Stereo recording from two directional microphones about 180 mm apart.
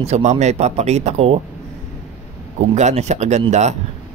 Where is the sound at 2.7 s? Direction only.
40° right (ahead or behind).